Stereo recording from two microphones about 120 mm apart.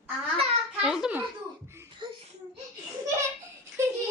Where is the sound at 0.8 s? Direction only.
5° right (ahead or behind).